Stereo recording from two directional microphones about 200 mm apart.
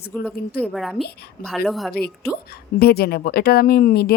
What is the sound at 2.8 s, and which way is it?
Speech, 50° left (ahead or behind).